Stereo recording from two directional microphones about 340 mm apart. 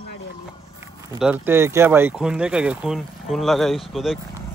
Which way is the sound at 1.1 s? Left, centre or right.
Centre.